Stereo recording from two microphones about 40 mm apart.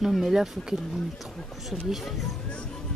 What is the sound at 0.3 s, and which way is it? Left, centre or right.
Speech, centre.